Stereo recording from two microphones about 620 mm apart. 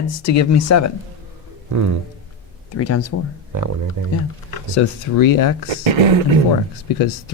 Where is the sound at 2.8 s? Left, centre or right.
Left.